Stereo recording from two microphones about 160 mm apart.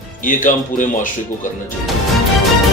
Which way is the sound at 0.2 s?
55° left (ahead or behind).